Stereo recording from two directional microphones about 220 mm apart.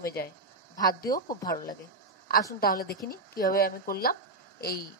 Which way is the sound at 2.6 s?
45° left (ahead or behind).